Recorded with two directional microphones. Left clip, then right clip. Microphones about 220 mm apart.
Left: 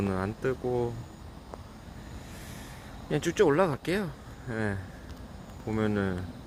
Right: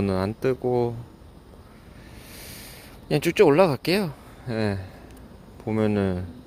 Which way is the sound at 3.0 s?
35° right (ahead or behind).